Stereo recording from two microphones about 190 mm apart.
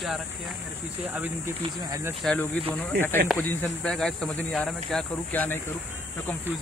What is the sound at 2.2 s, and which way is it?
Speech, 10° left (ahead or behind).